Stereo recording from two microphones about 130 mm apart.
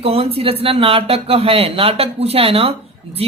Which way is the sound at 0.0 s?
50° right (ahead or behind).